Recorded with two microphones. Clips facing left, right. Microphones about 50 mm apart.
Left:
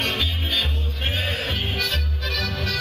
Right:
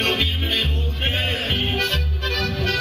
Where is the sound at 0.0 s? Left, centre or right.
Right.